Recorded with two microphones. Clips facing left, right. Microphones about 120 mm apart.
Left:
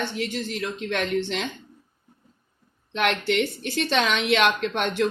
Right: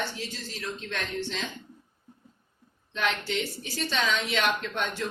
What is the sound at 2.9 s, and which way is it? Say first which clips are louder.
A woman's voice: left 6 dB; 70° left (ahead or behind).